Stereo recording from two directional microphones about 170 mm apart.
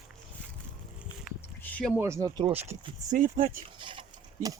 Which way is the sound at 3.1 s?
50° right (ahead or behind).